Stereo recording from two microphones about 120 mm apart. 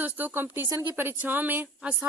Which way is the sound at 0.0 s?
15° right (ahead or behind).